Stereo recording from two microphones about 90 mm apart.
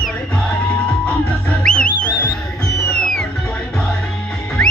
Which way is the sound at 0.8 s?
20° left (ahead or behind).